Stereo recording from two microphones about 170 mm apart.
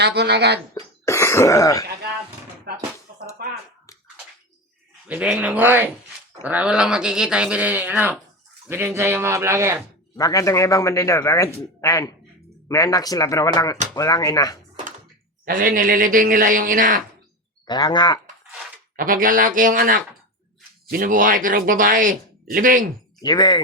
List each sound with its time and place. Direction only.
0.0 s speech: 80° right
0.7 s cough: 15° left (ahead or behind)
2.7 s speech: 70° right (ahead or behind)
3.4 s finger snapping: 60° right (ahead or behind)
5.0 s speech: 10° right (ahead or behind)
10.2 s a man's voice: 20° left (ahead or behind)
15.4 s speech: 55° right (ahead or behind)
17.7 s a man's voice: 25° left (ahead or behind)
18.9 s speech: 55° right (ahead or behind)
23.2 s a man's voice: 25° left (ahead or behind)